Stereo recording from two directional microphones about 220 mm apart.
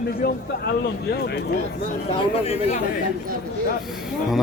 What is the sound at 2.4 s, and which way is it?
Speech, 30° left (ahead or behind).